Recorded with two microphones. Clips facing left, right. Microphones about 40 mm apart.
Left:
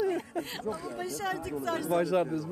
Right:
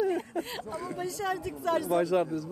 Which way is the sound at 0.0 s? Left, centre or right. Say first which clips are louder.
Right 1 dB; centre.